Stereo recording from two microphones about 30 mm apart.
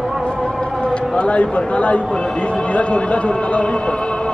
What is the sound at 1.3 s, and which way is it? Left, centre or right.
Speech, left.